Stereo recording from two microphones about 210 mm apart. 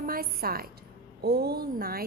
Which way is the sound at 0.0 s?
45° right (ahead or behind).